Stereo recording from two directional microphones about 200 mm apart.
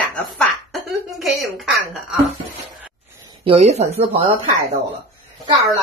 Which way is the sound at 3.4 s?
30° right (ahead or behind).